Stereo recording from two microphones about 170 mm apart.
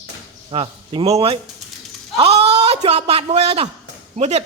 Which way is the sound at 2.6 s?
35° right (ahead or behind).